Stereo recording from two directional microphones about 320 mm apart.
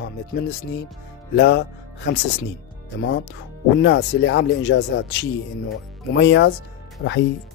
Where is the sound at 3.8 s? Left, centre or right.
Left.